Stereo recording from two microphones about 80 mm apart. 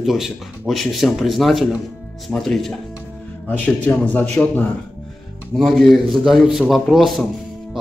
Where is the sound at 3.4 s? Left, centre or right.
Centre.